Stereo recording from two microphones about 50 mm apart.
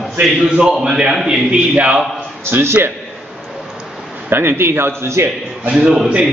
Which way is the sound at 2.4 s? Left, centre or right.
Right.